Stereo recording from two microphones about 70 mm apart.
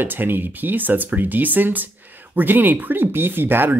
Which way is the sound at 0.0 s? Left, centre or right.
Right.